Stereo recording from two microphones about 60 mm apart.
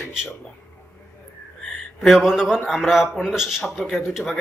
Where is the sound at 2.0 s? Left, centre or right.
Centre.